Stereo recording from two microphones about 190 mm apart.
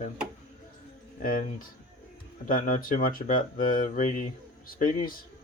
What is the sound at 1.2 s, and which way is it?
Speech, 45° left (ahead or behind).